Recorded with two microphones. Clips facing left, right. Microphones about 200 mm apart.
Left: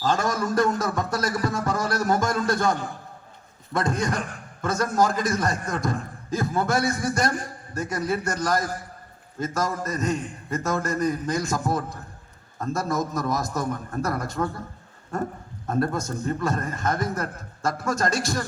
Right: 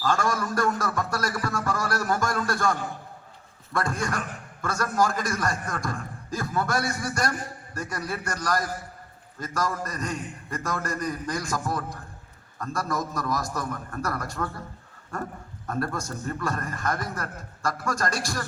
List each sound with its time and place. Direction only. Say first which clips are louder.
0.0 s music: left 2 dB; 20° left (ahead or behind)
3.7 s a man's voice: left 3 dB; 20° left (ahead or behind)
15.6 s a man's voice: left 5 dB; 25° left (ahead or behind)